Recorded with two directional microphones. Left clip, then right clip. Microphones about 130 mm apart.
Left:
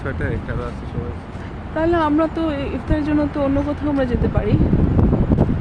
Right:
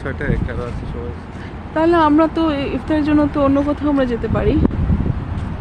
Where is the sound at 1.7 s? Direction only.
45° right (ahead or behind).